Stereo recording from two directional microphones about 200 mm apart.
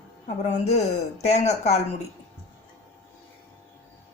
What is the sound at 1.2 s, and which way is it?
Speech, 35° left (ahead or behind).